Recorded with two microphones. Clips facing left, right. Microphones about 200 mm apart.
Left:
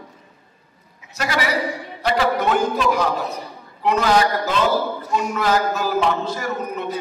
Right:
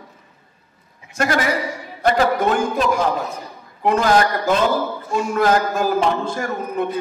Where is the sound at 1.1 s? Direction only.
50° right (ahead or behind).